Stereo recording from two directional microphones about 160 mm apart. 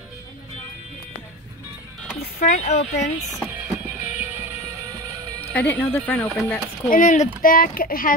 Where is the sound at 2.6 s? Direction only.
40° left (ahead or behind).